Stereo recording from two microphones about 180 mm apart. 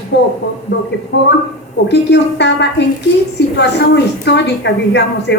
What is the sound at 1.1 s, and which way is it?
A man's voice, 80° left.